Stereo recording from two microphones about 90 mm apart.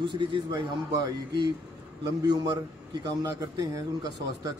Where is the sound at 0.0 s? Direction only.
65° right (ahead or behind).